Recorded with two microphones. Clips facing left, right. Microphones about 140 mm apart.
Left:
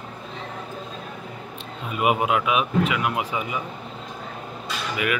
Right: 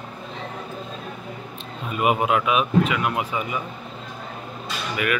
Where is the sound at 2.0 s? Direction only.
10° left (ahead or behind).